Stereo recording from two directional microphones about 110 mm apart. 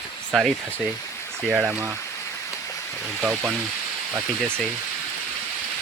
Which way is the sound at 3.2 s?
15° right (ahead or behind).